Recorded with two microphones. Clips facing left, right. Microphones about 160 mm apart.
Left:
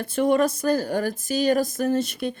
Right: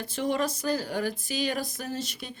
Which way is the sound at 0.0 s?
55° left (ahead or behind).